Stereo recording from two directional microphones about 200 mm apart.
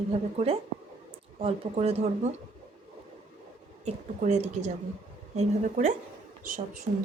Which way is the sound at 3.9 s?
35° right (ahead or behind).